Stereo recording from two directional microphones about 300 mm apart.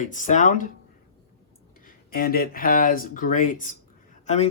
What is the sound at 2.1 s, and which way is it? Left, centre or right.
Speech, left.